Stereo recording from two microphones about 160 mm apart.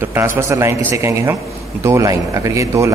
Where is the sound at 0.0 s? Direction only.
15° right (ahead or behind).